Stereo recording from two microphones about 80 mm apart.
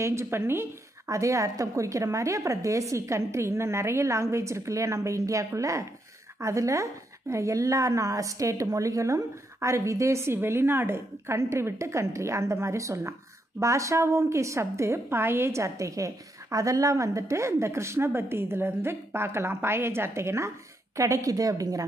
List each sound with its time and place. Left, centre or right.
0.0 s a woman's voice: right